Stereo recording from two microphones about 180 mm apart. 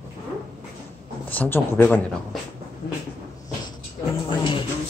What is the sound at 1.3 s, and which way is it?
Speech, 10° left (ahead or behind).